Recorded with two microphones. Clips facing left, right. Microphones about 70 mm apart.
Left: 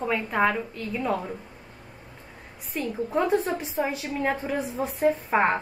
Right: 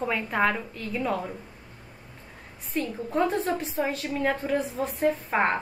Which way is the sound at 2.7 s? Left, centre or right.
Centre.